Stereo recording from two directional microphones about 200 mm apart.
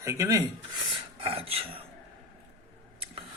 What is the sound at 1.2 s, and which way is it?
Speech, 30° right (ahead or behind).